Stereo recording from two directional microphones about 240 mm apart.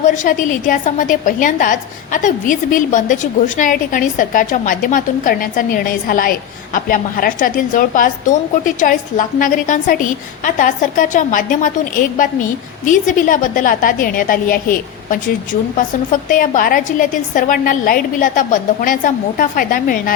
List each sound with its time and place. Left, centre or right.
0.0 s a woman's voice: left
16.3 s a woman's voice: left